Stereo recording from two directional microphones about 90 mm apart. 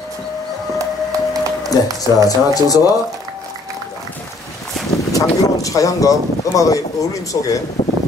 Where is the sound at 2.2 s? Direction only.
45° left (ahead or behind).